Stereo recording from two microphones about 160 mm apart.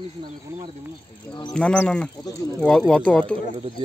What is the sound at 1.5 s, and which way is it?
Speech, 5° left (ahead or behind).